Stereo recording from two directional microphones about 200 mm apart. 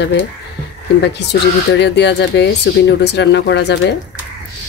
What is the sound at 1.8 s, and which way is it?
Speech, 60° left (ahead or behind).